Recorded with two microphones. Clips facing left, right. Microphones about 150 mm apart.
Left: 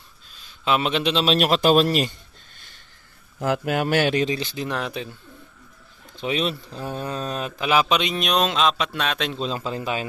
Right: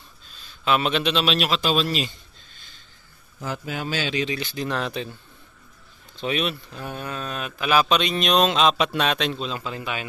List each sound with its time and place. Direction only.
0.7 s speech: 20° left (ahead or behind)
1.2 s speech: 45° left (ahead or behind)
3.3 s speech: 75° left (ahead or behind)
4.4 s speech: 30° left (ahead or behind)
4.6 s speech: 10° left (ahead or behind)
6.2 s speech: 25° left (ahead or behind); by 9.4 s centre (ahead or behind)
9.4 s a man's voice: 35° left (ahead or behind)